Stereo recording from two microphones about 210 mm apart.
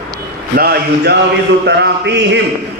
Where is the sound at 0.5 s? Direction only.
45° right (ahead or behind).